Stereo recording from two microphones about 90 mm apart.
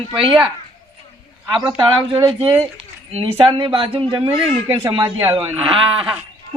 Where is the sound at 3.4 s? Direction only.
60° right (ahead or behind).